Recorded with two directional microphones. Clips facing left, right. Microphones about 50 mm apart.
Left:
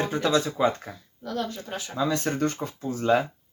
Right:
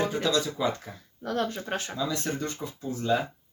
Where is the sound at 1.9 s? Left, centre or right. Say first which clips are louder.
Left 8 dB; left.